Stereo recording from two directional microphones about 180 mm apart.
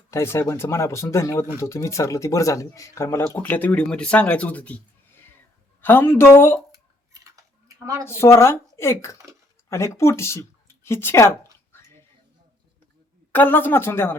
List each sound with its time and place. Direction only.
0.1 s speech: 15° left (ahead or behind)
5.8 s speech: 10° left (ahead or behind)
6.7 s a sound: 20° right (ahead or behind)
8.0 s speech: 15° left (ahead or behind)
13.3 s speech: 10° left (ahead or behind)